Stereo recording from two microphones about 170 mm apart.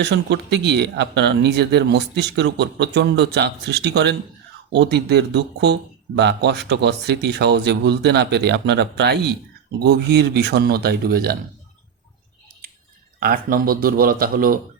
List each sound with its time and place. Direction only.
0.0 s speech: 85° right; by 11.3 s 65° right (ahead or behind)
13.1 s speech: 55° right (ahead or behind)